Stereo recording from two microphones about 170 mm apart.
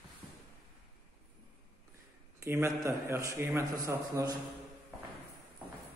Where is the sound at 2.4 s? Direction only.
15° right (ahead or behind).